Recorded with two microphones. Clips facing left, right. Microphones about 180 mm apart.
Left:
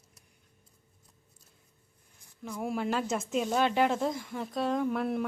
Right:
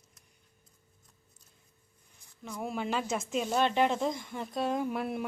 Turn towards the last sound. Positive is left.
turn(degrees=-5)  # may be behind; listen again after turning